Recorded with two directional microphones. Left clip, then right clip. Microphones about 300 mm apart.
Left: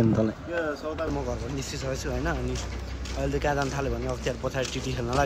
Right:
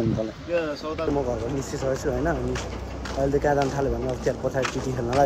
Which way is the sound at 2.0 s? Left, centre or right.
Centre.